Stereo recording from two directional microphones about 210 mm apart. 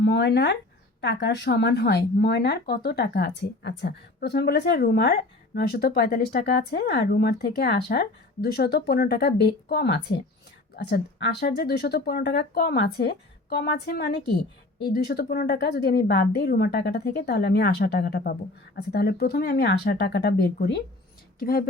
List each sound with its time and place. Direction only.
0.0 s speech: 55° left (ahead or behind)